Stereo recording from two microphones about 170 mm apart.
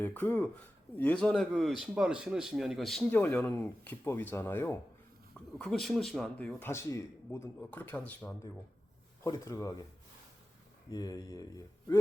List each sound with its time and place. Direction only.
0.0 s speech: 10° left (ahead or behind)
5.5 s speech: centre (ahead or behind)
6.6 s speech: 15° left (ahead or behind)
10.9 s speech: 20° left (ahead or behind)